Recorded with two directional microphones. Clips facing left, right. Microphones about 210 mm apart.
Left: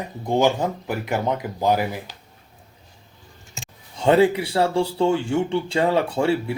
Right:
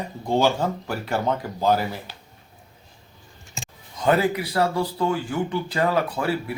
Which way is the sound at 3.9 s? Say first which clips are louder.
Left 4 dB; 25° left (ahead or behind).